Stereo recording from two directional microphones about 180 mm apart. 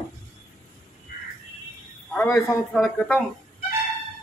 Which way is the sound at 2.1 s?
15° left (ahead or behind).